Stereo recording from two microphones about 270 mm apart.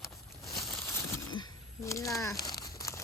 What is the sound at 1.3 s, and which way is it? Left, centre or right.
Crumpling, centre.